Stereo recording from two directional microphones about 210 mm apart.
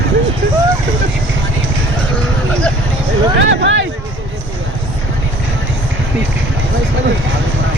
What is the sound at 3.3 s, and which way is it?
Speech, 60° right (ahead or behind).